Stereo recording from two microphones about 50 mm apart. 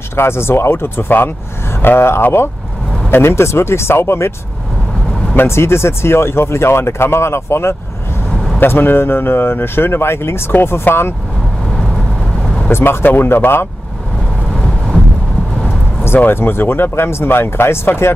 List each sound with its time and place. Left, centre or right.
0.1 s speech: left
5.5 s speech: left
8.5 s speech: left
12.7 s speech: left
16.3 s speech: left